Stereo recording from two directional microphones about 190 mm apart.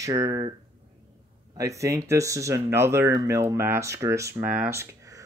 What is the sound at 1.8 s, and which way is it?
Speech, 15° right (ahead or behind).